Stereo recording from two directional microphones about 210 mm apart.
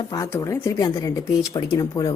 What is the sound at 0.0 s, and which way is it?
A woman's voice, 15° left (ahead or behind).